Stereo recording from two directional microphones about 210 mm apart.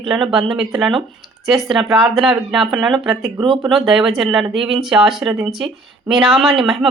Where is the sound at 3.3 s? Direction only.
20° right (ahead or behind).